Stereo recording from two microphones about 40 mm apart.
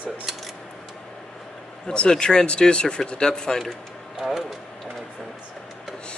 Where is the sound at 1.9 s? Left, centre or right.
Left.